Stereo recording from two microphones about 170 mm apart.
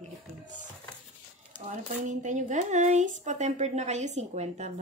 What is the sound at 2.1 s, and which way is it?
Speech, 45° right (ahead or behind).